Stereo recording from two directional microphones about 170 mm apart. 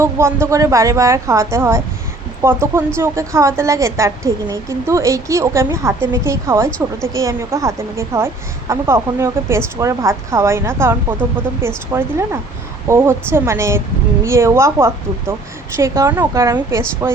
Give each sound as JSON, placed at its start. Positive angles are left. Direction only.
{"t": 0.0, "sound": "a woman's voice", "side_deg": -15}
{"t": 6.7, "sound": "a woman's voice", "side_deg": 5}
{"t": 7.1, "sound": "a woman's voice", "side_deg": -20}